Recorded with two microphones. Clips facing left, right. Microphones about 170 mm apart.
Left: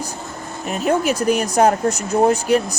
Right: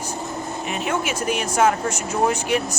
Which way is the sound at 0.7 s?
40° left (ahead or behind).